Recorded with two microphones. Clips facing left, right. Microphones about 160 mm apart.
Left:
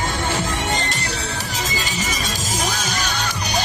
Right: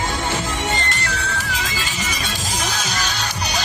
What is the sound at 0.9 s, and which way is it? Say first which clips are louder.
Music: right 1 dB; 40° left (ahead or behind).